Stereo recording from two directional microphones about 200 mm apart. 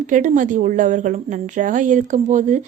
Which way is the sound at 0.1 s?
40° right (ahead or behind).